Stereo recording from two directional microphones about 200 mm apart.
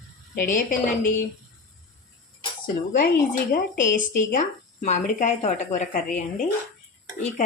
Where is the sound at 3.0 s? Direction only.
45° left (ahead or behind).